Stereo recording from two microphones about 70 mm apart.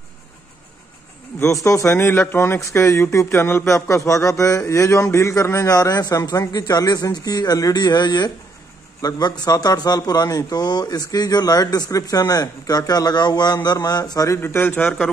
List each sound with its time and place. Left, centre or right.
1.4 s speech: left
9.0 s speech: left
13.8 s speech: left
14.4 s speech: left